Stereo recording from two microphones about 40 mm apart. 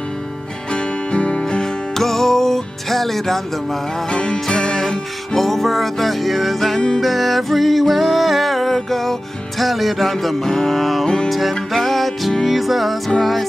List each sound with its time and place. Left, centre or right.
0.7 s music: left
1.4 s music: centre
4.1 s music: left; by 13.5 s centre